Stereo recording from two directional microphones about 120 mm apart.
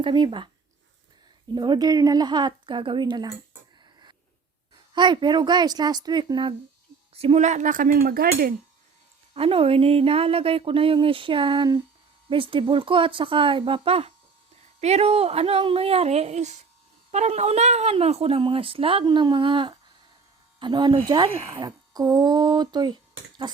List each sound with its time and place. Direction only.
0.0 s speech: 40° right (ahead or behind)
1.5 s speech: 40° right (ahead or behind)
4.9 s speech: 40° right (ahead or behind)
7.1 s speech: 55° right (ahead or behind); by 7.9 s 90° right
9.3 s a woman's voice: 50° right (ahead or behind); by 23.0 s 35° right (ahead or behind)